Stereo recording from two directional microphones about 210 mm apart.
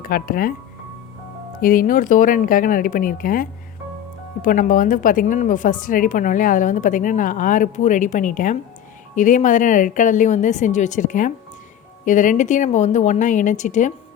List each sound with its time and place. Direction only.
0.0 s speech: 45° left (ahead or behind)
1.6 s a woman's voice: 40° left (ahead or behind)